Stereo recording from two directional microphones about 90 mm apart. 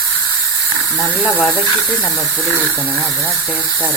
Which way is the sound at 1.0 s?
30° left (ahead or behind).